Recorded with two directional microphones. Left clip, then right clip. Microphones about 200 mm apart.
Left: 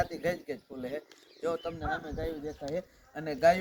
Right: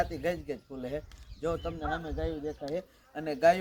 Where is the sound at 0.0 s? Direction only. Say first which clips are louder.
Even; centre (ahead or behind).